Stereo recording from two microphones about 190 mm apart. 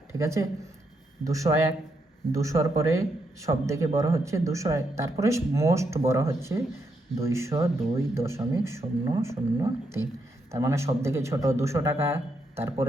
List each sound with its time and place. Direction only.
0.1 s speech: 15° right (ahead or behind)